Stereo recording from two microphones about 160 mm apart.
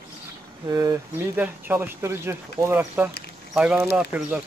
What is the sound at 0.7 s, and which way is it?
Speech, 20° right (ahead or behind).